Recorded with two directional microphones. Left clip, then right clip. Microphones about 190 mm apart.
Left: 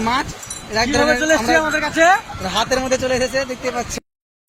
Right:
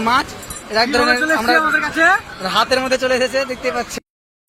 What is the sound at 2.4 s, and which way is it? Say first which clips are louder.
Speech: right 3 dB; 5° left (ahead or behind).